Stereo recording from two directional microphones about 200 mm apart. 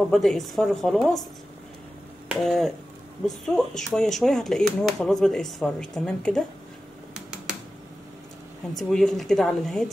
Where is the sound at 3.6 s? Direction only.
Centre (ahead or behind).